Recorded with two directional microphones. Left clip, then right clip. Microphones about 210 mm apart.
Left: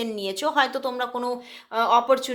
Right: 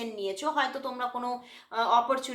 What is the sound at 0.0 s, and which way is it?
Speech, 50° left (ahead or behind).